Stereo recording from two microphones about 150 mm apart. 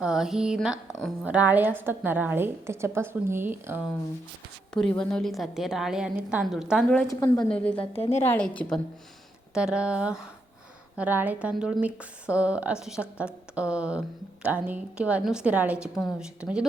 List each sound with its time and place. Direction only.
0.0 s a woman's voice: 5° right (ahead or behind)
4.7 s a woman's voice: 5° left (ahead or behind)
7.1 s a woman's voice: 25° left (ahead or behind)
7.8 s a woman's voice: 40° left (ahead or behind)
8.2 s a woman's voice: 10° left (ahead or behind)
9.6 s a woman's voice: 5° right (ahead or behind)